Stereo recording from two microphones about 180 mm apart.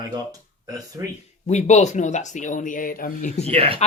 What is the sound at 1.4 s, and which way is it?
Speech, 40° left (ahead or behind).